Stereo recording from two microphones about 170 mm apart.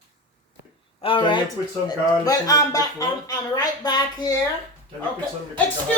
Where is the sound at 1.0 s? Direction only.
30° left (ahead or behind).